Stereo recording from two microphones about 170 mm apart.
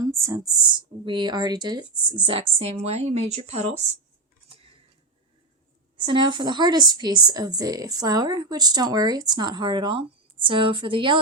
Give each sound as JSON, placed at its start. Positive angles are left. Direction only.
{"t": 0.0, "sound": "a woman's voice", "side_deg": -20}
{"t": 6.1, "sound": "a woman's voice", "side_deg": -25}